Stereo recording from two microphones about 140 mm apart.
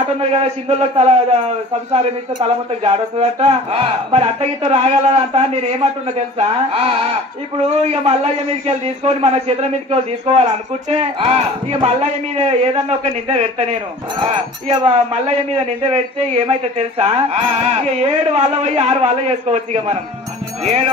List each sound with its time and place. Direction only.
0.2 s speech: 50° right (ahead or behind)
2.4 s speech: 45° right (ahead or behind)
11.0 s speech: 40° right (ahead or behind)
14.9 s speech: 50° right (ahead or behind)